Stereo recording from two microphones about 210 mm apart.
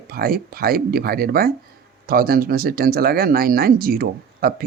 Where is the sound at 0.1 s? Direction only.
45° right (ahead or behind).